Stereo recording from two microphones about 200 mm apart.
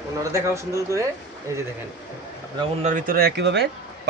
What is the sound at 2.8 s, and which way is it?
Speech, 40° right (ahead or behind).